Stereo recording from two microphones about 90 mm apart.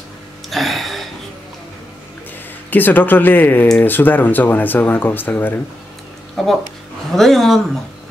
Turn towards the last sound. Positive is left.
turn(degrees=5)  # may be behind; listen again after turning